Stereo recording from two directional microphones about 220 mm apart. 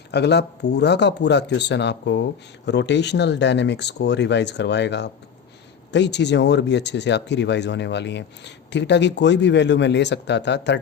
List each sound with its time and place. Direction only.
0.1 s speech: 50° left (ahead or behind)